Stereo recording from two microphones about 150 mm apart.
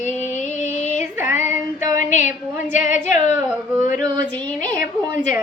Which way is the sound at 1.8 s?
55° left (ahead or behind).